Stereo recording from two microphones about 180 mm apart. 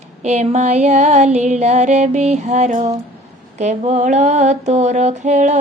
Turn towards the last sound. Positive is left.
turn(degrees=-40)  # may be behind; listen again after turning